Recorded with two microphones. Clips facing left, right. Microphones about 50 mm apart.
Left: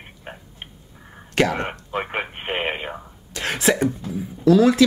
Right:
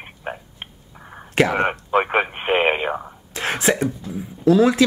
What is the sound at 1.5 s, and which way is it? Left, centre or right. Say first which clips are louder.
Radio: right 7 dB; right.